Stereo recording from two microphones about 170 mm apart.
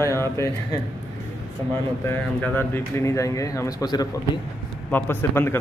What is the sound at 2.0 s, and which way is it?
Speech, 15° left (ahead or behind).